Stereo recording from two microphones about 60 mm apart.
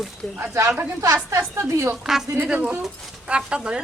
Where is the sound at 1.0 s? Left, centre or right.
Right.